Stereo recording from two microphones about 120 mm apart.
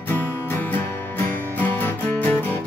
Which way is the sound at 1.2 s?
15° left (ahead or behind).